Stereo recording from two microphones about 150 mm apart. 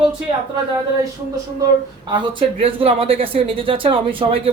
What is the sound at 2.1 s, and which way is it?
Speech, 35° right (ahead or behind).